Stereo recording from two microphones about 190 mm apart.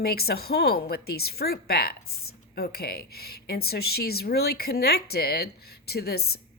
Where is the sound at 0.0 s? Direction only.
55° left (ahead or behind).